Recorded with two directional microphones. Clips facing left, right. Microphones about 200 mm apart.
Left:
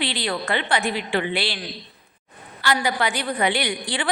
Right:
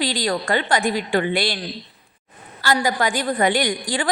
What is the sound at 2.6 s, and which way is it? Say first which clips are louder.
A woman's voice: right 2 dB; 40° right (ahead or behind).